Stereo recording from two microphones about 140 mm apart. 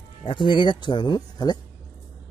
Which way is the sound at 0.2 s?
35° left (ahead or behind).